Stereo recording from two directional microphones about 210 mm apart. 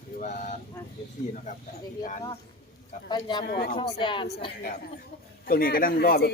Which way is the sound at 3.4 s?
50° left (ahead or behind).